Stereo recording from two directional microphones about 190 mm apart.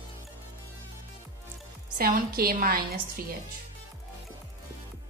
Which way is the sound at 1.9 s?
50° right (ahead or behind).